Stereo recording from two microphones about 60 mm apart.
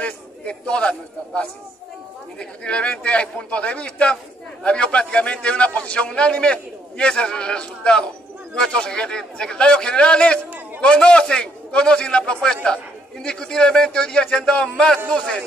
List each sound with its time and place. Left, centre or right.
0.0 s a man's voice: centre